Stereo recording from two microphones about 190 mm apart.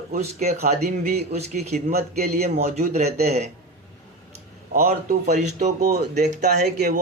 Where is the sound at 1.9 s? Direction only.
55° right (ahead or behind).